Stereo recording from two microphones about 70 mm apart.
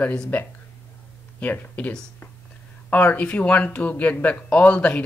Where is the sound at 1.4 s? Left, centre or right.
Left.